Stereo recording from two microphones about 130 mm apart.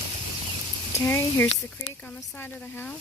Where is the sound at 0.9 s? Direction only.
20° left (ahead or behind).